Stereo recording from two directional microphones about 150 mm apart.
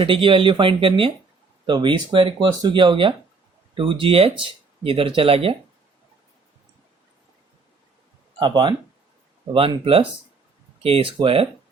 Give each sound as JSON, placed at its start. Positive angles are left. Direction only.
{"t": 0.0, "sound": "speech", "side_deg": -35}
{"t": 8.4, "sound": "speech", "side_deg": -30}